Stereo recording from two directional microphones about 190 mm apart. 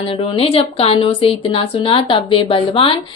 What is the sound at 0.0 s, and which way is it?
A woman's voice, 30° left (ahead or behind).